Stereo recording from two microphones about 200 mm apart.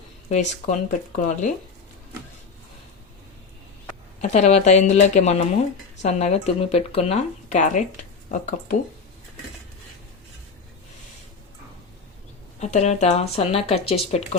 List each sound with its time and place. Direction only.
0.3 s speech: 35° left (ahead or behind)
4.2 s speech: 35° left (ahead or behind)
12.5 s speech: 35° left (ahead or behind)